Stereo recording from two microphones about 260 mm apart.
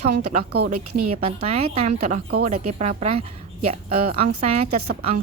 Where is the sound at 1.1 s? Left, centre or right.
Right.